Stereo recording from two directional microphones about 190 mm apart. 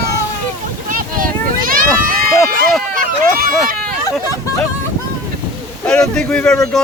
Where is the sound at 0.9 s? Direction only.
45° right (ahead or behind).